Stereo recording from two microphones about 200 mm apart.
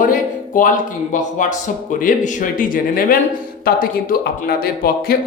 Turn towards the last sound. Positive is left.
turn(degrees=50)  # may be behind; listen again after turning